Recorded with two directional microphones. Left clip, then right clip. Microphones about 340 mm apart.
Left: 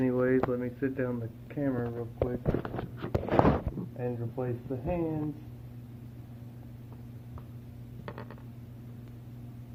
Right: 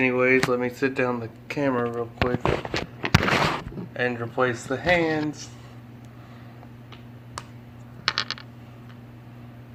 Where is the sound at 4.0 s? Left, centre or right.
Right.